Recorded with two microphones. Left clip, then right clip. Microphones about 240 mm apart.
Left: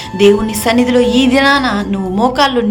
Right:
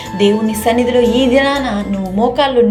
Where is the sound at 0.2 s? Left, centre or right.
Centre.